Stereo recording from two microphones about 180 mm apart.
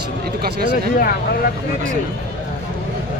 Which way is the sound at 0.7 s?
60° left (ahead or behind).